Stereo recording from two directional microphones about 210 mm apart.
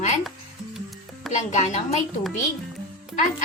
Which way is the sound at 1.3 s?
30° left (ahead or behind).